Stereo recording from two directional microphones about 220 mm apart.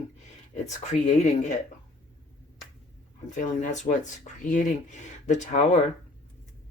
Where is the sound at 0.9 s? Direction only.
30° left (ahead or behind).